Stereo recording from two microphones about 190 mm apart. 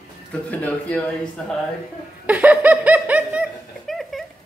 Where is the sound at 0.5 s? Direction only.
10° left (ahead or behind).